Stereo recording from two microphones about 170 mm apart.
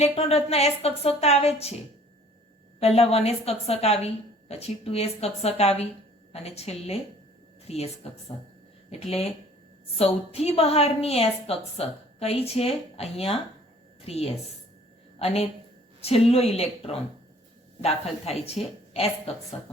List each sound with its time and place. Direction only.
0.0 s a woman's voice: 35° left (ahead or behind)
2.8 s a woman's voice: 35° left (ahead or behind)